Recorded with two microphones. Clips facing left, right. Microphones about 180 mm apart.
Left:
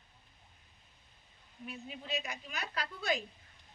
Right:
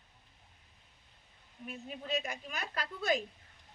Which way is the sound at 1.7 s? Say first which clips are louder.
Right 3 dB; 45° right (ahead or behind).